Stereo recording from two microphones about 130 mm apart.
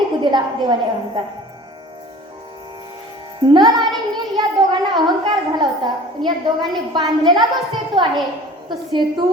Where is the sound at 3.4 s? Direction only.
35° right (ahead or behind).